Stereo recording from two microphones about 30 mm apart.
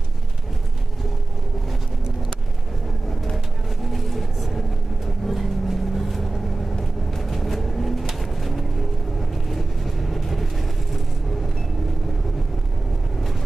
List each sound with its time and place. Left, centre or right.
3.8 s vehicle: centre